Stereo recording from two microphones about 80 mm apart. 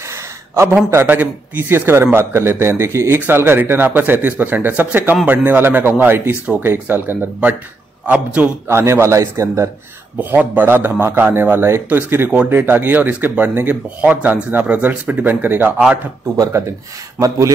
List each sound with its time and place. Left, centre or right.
0.1 s a sound: right
1.0 s a man's voice: right
8.6 s a man's voice: right
10.1 s speech: right